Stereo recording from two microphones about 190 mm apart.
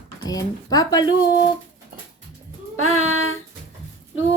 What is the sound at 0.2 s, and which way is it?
Speech, 20° left (ahead or behind).